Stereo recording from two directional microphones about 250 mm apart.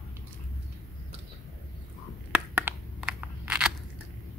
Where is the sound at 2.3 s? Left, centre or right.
Centre.